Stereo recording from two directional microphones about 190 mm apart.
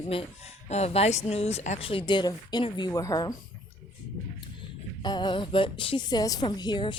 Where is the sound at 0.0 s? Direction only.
30° left (ahead or behind).